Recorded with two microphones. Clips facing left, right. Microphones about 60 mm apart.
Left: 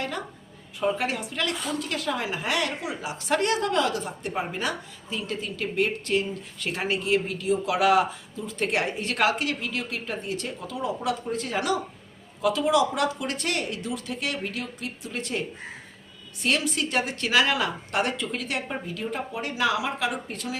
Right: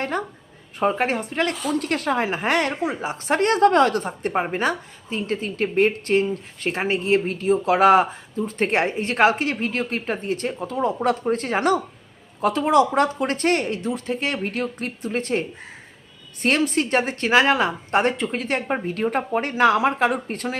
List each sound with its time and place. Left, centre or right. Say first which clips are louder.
0.8 s a woman's voice: right 5 dB; right